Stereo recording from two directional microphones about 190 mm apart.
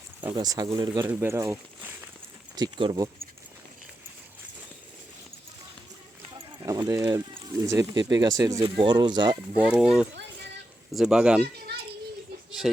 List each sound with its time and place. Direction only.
0.3 s speech: 20° right (ahead or behind)
1.1 s speech: 10° right (ahead or behind)
2.6 s speech: 25° right (ahead or behind)
6.3 s speech: 25° right (ahead or behind)
9.6 s speech: 5° right (ahead or behind)